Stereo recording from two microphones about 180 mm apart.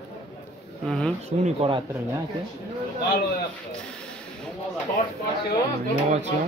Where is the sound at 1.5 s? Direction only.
30° right (ahead or behind).